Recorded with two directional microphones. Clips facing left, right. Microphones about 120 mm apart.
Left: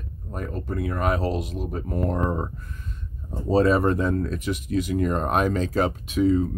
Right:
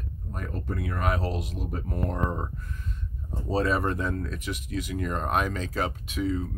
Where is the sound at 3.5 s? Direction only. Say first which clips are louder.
Left 7 dB; 35° left (ahead or behind).